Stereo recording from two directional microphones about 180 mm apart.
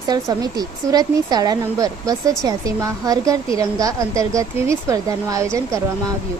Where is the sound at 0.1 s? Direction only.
20° right (ahead or behind).